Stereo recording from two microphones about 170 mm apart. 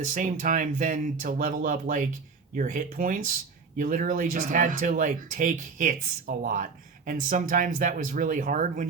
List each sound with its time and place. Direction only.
0.1 s speech: 50° right (ahead or behind)